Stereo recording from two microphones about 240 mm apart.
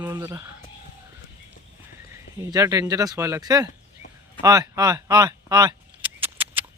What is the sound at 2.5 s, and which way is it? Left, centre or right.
Speech, centre.